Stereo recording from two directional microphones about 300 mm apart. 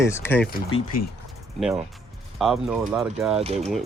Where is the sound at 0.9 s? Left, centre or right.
Left.